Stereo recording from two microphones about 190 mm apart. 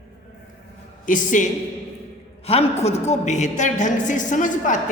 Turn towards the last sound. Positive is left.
turn(degrees=40)  # may be behind; listen again after turning